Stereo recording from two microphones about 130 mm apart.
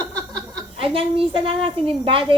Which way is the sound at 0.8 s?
45° right (ahead or behind).